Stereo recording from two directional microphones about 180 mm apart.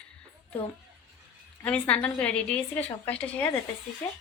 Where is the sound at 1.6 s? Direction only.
5° left (ahead or behind).